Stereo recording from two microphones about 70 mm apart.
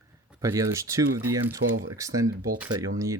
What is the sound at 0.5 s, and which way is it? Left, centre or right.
Speech, right.